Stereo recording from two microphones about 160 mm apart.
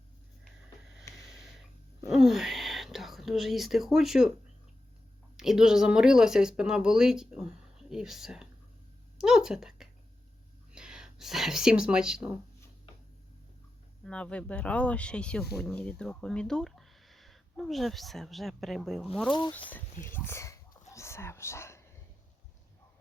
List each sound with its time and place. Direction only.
2.0 s speech: centre (ahead or behind)
5.4 s speech: 5° right (ahead or behind)
14.0 s speech: 5° left (ahead or behind)
20.1 s whispering: 15° left (ahead or behind)